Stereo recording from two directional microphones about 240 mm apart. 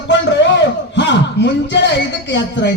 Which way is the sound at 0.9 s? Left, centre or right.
Left.